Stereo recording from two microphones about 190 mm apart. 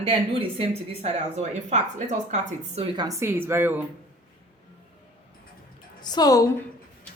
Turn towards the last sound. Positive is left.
turn(degrees=20)  # may be behind; listen again after turning